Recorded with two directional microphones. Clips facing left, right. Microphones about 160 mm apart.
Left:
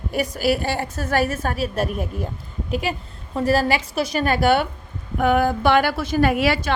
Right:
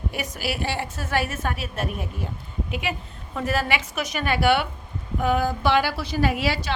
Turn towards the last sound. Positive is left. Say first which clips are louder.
# left 5 dB
turn(degrees=55)  # may be behind; listen again after turning